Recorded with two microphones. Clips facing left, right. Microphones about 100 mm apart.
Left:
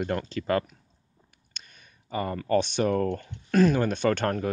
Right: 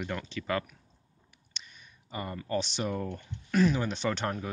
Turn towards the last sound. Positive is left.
turn(degrees=50)  # may be behind; listen again after turning